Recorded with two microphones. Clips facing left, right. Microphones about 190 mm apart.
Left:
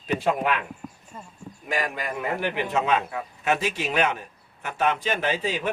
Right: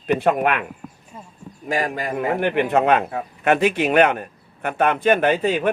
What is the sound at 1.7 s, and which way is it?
A man's voice, 40° right (ahead or behind).